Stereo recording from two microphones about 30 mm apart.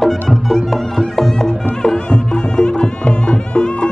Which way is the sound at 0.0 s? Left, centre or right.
Centre.